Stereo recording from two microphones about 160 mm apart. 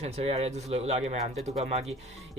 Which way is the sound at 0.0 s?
40° right (ahead or behind).